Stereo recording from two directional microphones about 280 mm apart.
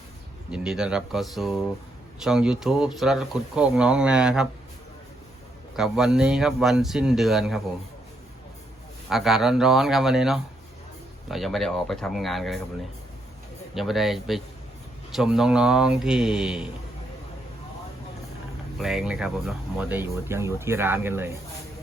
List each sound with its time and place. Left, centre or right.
0.5 s speech: centre
5.7 s speech: centre
9.0 s speech: centre
13.7 s speech: centre
18.8 s speech: centre